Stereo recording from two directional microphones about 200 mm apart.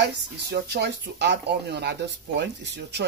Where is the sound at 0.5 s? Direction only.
55° right (ahead or behind).